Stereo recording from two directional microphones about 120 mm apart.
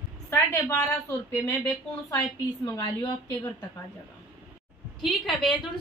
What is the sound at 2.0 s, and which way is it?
A woman's voice, 30° left (ahead or behind).